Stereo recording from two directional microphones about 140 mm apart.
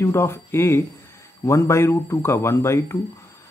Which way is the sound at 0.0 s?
20° left (ahead or behind).